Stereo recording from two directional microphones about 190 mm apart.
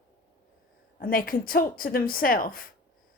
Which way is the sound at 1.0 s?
50° left (ahead or behind).